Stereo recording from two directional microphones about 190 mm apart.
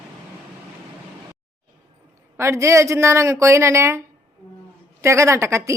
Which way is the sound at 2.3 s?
15° right (ahead or behind).